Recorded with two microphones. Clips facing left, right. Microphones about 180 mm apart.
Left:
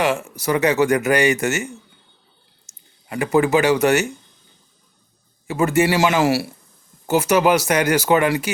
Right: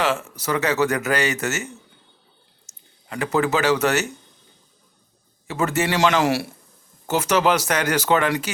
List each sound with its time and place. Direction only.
0.0 s speech: 15° left (ahead or behind)
5.5 s speech: 10° left (ahead or behind)